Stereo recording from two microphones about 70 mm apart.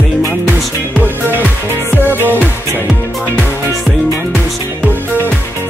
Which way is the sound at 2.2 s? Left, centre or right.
Right.